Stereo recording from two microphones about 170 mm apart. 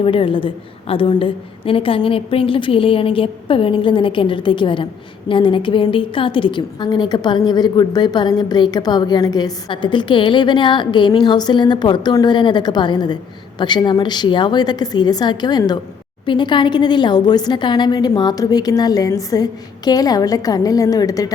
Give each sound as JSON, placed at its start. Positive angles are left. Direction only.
{"t": 0.0, "sound": "a woman's voice", "side_deg": 30}